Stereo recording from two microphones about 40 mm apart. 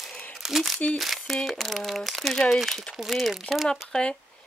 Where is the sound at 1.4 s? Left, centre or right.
Centre.